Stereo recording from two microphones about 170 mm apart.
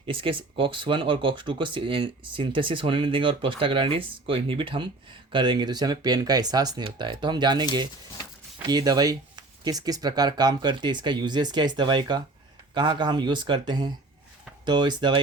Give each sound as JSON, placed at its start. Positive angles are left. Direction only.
{"t": 0.0, "sound": "speech", "side_deg": -30}